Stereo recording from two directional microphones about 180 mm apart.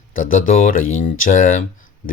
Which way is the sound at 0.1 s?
50° left (ahead or behind).